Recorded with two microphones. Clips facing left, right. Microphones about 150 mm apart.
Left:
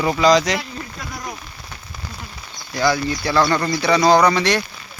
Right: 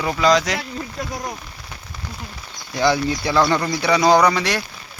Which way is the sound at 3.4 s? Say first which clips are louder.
Left 1 dB; 5° right (ahead or behind).